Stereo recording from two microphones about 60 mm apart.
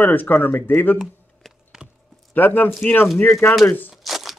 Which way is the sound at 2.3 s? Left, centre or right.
Left.